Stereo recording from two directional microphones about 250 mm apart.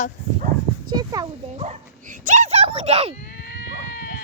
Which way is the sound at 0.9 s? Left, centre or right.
Centre.